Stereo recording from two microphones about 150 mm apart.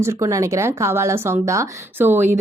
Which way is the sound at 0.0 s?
20° right (ahead or behind).